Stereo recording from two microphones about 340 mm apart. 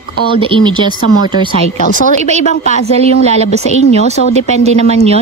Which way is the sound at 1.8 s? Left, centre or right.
Left.